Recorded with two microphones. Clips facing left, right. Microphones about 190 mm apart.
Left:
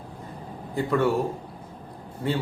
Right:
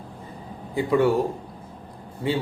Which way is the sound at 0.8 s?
15° right (ahead or behind).